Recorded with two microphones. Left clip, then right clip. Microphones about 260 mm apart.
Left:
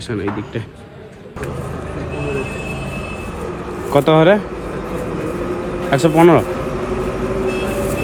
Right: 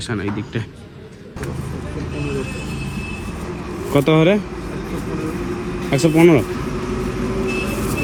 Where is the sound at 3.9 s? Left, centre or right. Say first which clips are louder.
Left 4 dB; centre.